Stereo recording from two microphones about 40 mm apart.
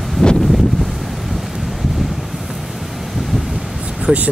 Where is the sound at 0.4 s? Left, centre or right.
Centre.